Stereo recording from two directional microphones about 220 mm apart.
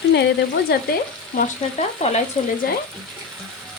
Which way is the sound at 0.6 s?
40° left (ahead or behind).